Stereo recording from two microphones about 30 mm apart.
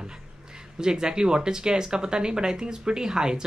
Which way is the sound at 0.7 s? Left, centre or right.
Right.